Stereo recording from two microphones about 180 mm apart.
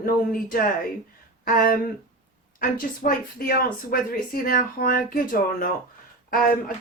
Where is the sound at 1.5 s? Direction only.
55° left (ahead or behind).